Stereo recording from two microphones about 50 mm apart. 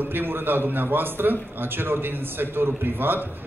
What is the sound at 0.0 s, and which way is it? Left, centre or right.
A man's voice, right.